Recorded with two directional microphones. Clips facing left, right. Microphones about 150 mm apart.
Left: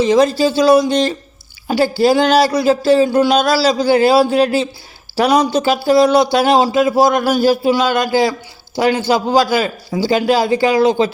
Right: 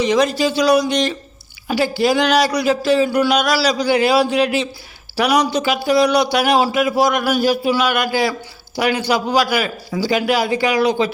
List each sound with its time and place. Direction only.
0.0 s speech: 30° left (ahead or behind)